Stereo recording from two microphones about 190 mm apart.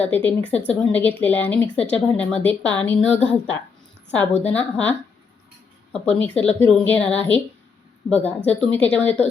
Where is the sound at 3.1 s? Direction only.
35° left (ahead or behind).